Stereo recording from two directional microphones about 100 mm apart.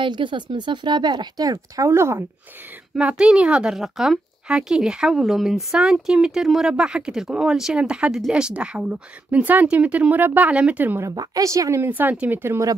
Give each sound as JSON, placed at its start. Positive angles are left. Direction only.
{"t": 0.0, "sound": "speech", "side_deg": -55}
{"t": 3.0, "sound": "speech", "side_deg": -10}
{"t": 11.1, "sound": "a woman's voice", "side_deg": -35}
{"t": 11.8, "sound": "speech", "side_deg": -20}